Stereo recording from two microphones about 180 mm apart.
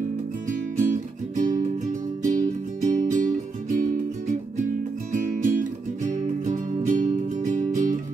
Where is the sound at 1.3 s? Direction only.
45° right (ahead or behind).